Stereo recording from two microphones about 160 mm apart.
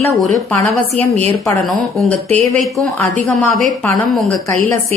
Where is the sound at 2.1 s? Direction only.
10° left (ahead or behind).